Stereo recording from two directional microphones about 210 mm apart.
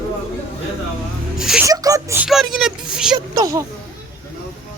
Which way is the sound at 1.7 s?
15° right (ahead or behind).